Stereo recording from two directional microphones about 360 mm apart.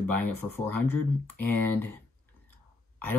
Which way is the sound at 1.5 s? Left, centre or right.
Right.